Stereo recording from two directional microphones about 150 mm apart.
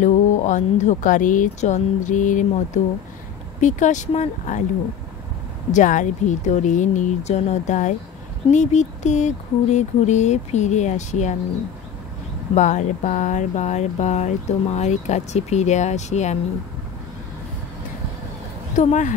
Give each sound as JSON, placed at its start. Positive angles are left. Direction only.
{"t": 0.0, "sound": "speech", "side_deg": 55}
{"t": 5.7, "sound": "speech", "side_deg": 55}
{"t": 12.5, "sound": "speech", "side_deg": 55}
{"t": 18.8, "sound": "speech", "side_deg": 55}